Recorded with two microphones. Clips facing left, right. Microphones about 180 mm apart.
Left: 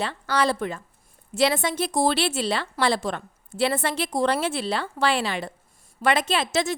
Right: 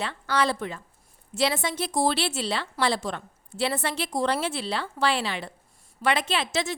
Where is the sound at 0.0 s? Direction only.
40° left (ahead or behind).